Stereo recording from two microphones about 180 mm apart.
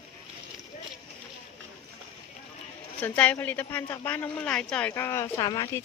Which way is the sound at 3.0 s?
5° left (ahead or behind).